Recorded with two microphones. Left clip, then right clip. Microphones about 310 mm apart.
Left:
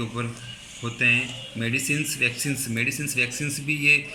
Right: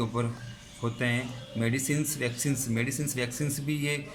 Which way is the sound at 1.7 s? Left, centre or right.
Right.